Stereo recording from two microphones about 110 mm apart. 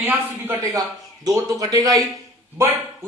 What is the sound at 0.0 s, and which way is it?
A man's voice, 25° right (ahead or behind).